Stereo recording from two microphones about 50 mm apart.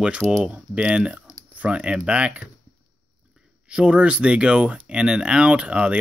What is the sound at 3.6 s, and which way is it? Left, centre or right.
Speech, right.